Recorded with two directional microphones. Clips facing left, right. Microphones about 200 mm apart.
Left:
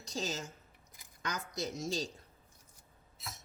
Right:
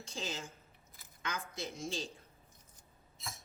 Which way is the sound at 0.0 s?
40° left (ahead or behind).